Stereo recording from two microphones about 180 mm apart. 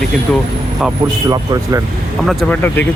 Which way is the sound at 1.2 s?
20° right (ahead or behind).